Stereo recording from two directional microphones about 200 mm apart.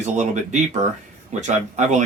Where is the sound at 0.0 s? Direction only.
35° right (ahead or behind).